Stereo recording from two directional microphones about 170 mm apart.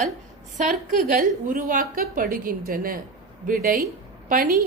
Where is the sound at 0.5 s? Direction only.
50° right (ahead or behind).